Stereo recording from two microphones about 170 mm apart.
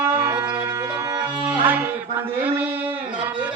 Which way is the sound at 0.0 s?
15° right (ahead or behind).